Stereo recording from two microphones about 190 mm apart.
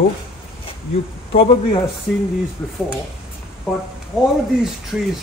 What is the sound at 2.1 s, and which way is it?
Speech, centre (ahead or behind).